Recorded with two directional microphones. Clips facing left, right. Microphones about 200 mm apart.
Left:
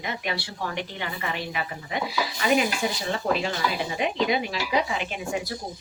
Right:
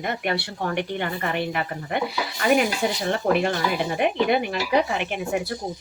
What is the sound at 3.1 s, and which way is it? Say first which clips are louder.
Speech: right 6 dB; 60° right (ahead or behind).